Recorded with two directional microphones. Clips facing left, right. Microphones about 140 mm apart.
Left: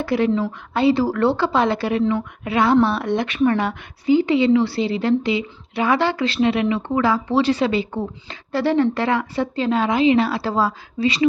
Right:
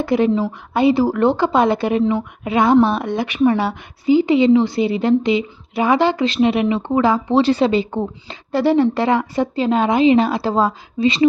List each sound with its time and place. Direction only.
0.0 s a woman's voice: 20° right (ahead or behind)